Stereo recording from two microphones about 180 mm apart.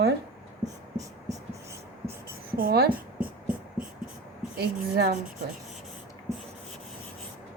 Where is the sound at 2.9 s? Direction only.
10° right (ahead or behind).